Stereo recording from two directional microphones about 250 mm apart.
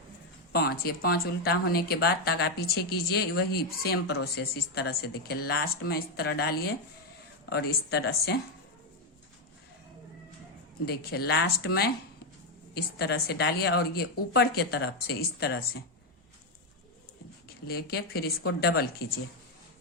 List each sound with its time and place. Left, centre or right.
0.5 s speech: left
10.8 s speech: left
17.7 s speech: left